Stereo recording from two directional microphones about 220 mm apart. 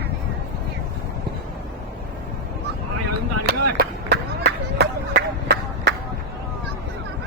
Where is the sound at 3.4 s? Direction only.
45° right (ahead or behind).